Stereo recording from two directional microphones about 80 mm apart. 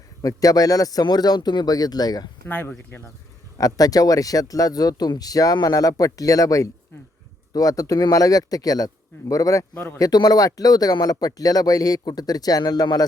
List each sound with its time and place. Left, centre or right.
0.2 s speech: left
2.5 s speech: left
3.6 s speech: left
10.0 s speech: left